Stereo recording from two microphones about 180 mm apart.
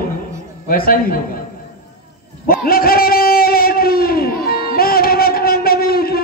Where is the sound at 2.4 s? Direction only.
55° left (ahead or behind).